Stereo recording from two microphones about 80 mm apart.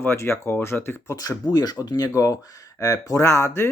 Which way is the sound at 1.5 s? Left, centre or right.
Left.